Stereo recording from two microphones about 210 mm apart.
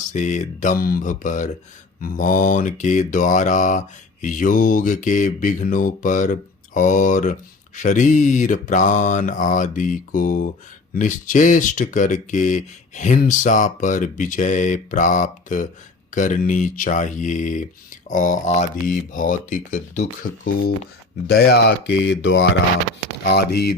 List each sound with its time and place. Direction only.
0.1 s mantra: 35° left (ahead or behind)
21.2 s speech: 50° left (ahead or behind)